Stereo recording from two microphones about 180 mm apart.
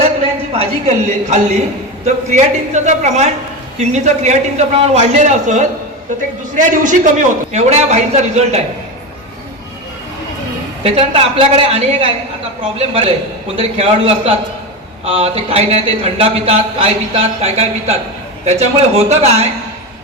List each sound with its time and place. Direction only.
0.0 s a man's voice: 35° right (ahead or behind)
10.8 s a man's voice: 30° right (ahead or behind)
13.6 s a man's voice: 35° right (ahead or behind)